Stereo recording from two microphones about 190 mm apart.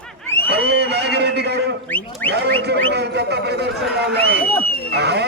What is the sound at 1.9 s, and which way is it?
Goat, 10° left (ahead or behind).